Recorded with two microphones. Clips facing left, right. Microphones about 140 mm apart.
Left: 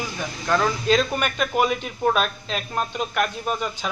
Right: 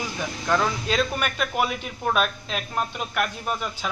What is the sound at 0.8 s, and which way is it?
A man's voice, 5° right (ahead or behind).